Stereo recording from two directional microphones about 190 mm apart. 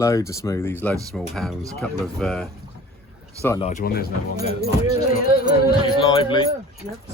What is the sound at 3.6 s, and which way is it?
Speech, 40° left (ahead or behind).